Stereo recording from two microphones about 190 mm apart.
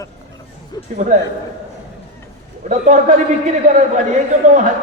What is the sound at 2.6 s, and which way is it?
Speech, 40° right (ahead or behind).